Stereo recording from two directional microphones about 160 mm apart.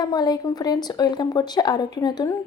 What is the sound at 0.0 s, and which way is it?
Speech, 25° left (ahead or behind).